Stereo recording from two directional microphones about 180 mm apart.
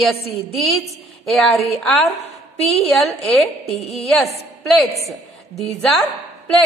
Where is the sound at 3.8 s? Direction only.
35° left (ahead or behind).